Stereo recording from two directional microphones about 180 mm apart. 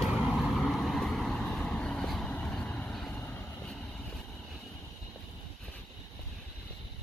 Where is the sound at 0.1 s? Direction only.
Centre (ahead or behind).